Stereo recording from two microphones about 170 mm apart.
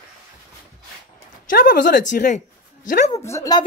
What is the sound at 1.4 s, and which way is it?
Speech, 55° left (ahead or behind).